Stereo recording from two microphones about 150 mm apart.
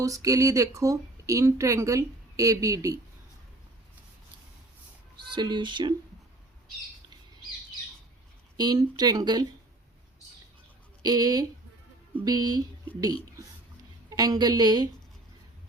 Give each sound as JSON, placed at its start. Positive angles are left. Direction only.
{"t": 0.0, "sound": "speech", "side_deg": -20}
{"t": 5.3, "sound": "speech", "side_deg": -30}
{"t": 8.5, "sound": "speech", "side_deg": -30}
{"t": 11.0, "sound": "speech", "side_deg": -25}
{"t": 14.1, "sound": "speech", "side_deg": -25}